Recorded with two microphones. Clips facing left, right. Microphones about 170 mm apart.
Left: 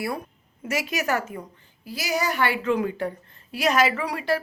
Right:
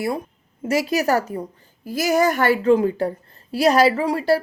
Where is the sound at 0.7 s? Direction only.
35° right (ahead or behind).